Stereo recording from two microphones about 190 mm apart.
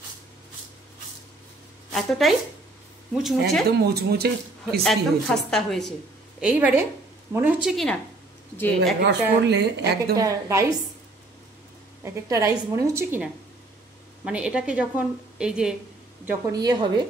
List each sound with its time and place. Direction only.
1.9 s a woman's voice: centre (ahead or behind)
3.9 s speech: 55° right (ahead or behind)
4.8 s a woman's voice: centre (ahead or behind)
6.4 s a woman's voice: 10° right (ahead or behind); by 8.9 s 10° left (ahead or behind)
9.0 s speech: 65° right (ahead or behind)
10.1 s a woman's voice: 20° right (ahead or behind)
12.0 s a woman's voice: 15° right (ahead or behind)
16.5 s a woman's voice: 20° right (ahead or behind)